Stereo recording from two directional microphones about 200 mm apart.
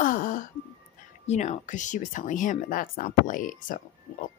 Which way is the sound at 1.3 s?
35° left (ahead or behind).